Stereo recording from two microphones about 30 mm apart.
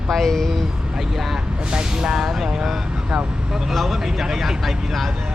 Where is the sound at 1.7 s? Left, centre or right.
Right.